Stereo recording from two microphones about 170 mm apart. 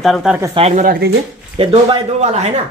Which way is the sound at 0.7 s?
55° right (ahead or behind).